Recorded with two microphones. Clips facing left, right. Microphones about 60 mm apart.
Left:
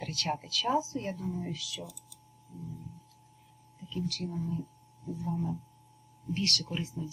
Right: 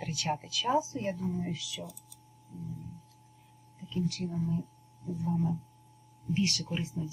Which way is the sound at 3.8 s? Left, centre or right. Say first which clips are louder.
Right 2 dB; right.